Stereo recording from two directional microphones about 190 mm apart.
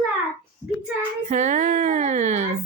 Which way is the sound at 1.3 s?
40° right (ahead or behind).